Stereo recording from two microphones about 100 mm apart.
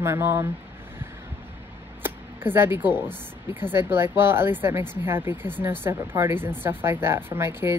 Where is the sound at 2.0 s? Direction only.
20° right (ahead or behind).